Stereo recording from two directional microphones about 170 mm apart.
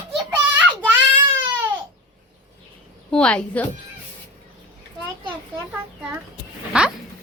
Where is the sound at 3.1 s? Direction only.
5° left (ahead or behind).